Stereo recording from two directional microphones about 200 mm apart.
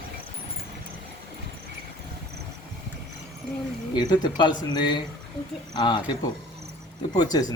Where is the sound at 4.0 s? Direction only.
20° left (ahead or behind).